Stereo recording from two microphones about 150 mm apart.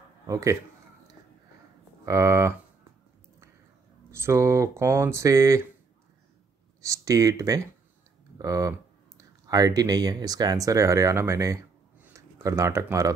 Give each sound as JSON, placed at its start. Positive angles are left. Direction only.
{"t": 0.3, "sound": "speech", "side_deg": -20}
{"t": 2.0, "sound": "speech", "side_deg": -20}
{"t": 4.1, "sound": "speech", "side_deg": -20}
{"t": 6.8, "sound": "speech", "side_deg": -20}